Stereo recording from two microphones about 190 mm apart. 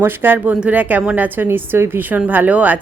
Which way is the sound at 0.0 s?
10° right (ahead or behind).